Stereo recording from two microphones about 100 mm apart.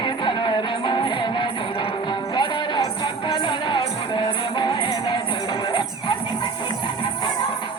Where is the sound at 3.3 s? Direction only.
50° left (ahead or behind).